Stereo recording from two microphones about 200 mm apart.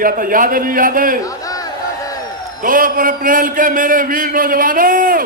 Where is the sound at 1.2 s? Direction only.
15° left (ahead or behind).